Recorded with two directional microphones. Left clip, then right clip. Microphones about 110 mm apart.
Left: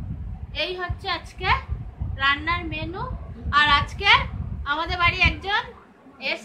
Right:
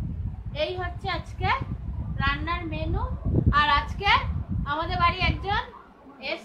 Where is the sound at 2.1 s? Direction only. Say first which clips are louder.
Left 6 dB; centre (ahead or behind).